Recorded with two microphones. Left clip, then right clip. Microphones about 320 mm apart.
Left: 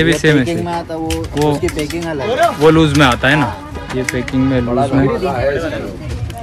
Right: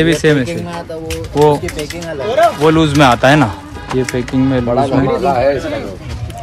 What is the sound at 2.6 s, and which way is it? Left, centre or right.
Speech, centre.